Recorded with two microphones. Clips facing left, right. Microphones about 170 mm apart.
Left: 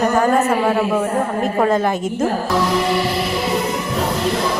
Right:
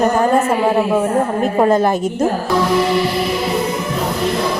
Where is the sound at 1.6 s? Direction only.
35° right (ahead or behind).